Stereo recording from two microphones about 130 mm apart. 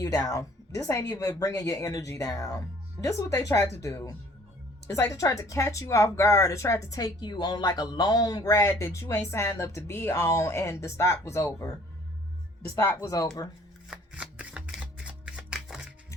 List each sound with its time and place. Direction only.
0.0 s speech: 25° left (ahead or behind)
13.9 s shuffling cards: 10° right (ahead or behind)